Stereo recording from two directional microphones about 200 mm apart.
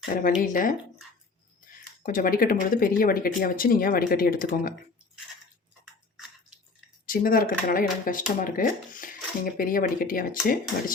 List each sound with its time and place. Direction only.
0.0 s speech: 45° left (ahead or behind)
7.1 s speech: 45° left (ahead or behind)